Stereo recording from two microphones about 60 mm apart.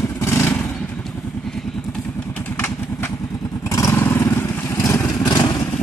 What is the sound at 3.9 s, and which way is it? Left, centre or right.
Motorcycle, left.